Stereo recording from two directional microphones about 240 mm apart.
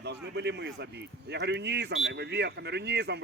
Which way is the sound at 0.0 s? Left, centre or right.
Right.